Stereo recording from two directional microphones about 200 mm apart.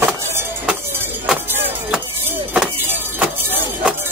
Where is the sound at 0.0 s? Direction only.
10° right (ahead or behind).